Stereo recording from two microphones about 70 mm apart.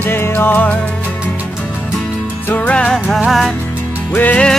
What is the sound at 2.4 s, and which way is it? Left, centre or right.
Music, left.